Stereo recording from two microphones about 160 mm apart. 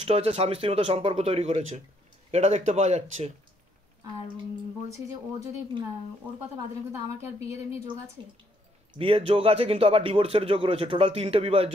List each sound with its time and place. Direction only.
0.0 s speech: 40° right (ahead or behind)
4.8 s speech: 20° right (ahead or behind)
7.4 s speech: 20° right (ahead or behind)
8.9 s speech: 35° right (ahead or behind)